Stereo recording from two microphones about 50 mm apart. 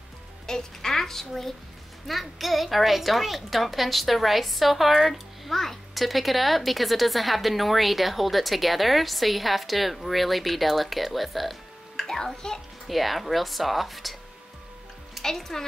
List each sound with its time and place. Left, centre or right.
0.5 s a woman's voice: centre
12.0 s a child's voice: centre
12.8 s a woman's voice: centre
15.2 s a woman's voice: centre